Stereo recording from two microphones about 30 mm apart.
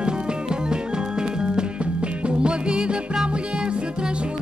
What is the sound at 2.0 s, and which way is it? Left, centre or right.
Music, right.